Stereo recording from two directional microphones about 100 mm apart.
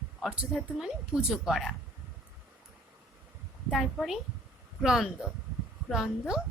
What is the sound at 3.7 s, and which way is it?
Speech, centre (ahead or behind).